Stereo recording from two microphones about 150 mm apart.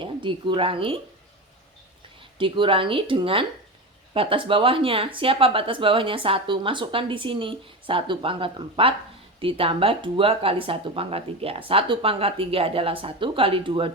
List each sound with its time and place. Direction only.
0.0 s speech: 35° right (ahead or behind)
2.4 s speech: 35° right (ahead or behind)